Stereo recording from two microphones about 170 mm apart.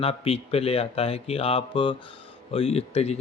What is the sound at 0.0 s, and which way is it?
Speech, 35° left (ahead or behind).